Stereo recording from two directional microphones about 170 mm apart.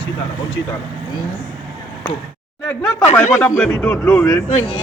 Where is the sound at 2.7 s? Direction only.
15° left (ahead or behind).